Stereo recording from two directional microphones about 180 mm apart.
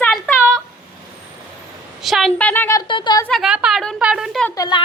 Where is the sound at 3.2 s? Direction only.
Centre (ahead or behind).